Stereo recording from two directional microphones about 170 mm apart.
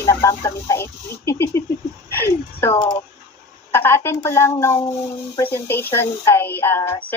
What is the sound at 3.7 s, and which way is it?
A woman's voice, 15° left (ahead or behind).